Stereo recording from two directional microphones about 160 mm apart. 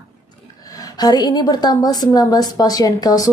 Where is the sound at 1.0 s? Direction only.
25° left (ahead or behind).